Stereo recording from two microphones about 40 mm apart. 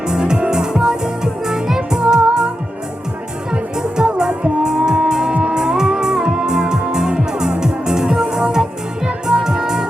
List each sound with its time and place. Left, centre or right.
0.1 s music: centre
3.5 s music: centre